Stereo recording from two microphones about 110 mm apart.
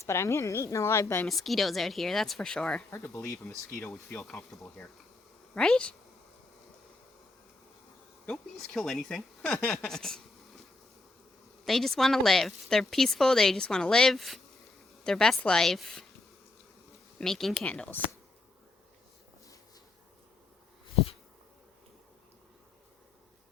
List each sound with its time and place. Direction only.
0.0 s a woman's voice: 25° left (ahead or behind)
1.3 s a woman's voice: centre (ahead or behind)
2.9 s a woman's voice: 25° left (ahead or behind)
4.5 s a woman's voice: centre (ahead or behind)
8.3 s a woman's voice: centre (ahead or behind)
11.6 s a woman's voice: centre (ahead or behind)
17.2 s a woman's voice: 5° left (ahead or behind)